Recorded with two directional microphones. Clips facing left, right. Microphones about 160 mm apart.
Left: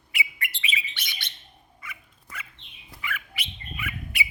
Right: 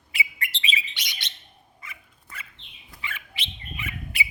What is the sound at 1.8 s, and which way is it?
Dog, 30° right (ahead or behind).